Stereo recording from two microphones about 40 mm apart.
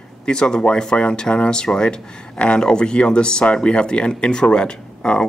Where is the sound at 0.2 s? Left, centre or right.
Left.